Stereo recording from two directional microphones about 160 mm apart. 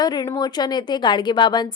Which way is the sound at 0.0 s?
25° left (ahead or behind).